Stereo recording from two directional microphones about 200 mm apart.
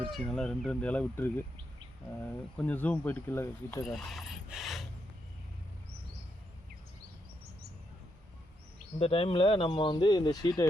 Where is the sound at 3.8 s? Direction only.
Centre (ahead or behind).